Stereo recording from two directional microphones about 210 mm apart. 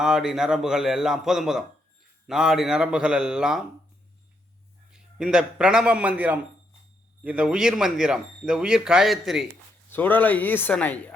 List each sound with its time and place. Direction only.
0.0 s speech: 5° right (ahead or behind)
4.9 s a man's voice: 5° right (ahead or behind)